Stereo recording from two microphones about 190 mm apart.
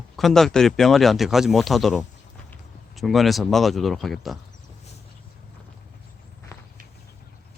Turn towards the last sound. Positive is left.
turn(degrees=15)  # may be behind; listen again after turning